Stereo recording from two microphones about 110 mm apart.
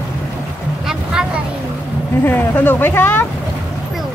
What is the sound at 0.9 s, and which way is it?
Vehicle, 5° right (ahead or behind).